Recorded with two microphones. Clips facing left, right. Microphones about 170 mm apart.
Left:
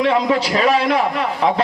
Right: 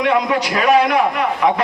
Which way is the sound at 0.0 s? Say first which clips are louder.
Even; 30° left (ahead or behind).